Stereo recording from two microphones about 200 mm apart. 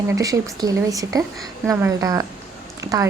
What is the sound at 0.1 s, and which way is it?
A woman's voice, 15° right (ahead or behind).